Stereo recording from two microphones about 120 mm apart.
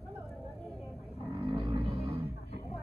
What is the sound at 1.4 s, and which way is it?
Music, 50° right (ahead or behind).